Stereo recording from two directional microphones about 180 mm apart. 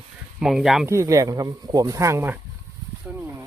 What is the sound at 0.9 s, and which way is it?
Speech, 15° right (ahead or behind).